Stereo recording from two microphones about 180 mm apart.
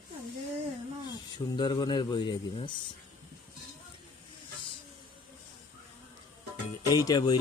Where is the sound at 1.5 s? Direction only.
25° left (ahead or behind).